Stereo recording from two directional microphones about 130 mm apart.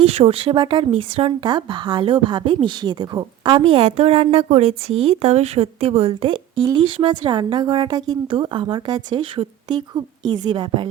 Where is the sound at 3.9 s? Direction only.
50° right (ahead or behind).